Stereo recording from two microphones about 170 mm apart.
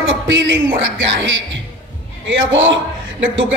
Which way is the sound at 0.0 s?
90° right.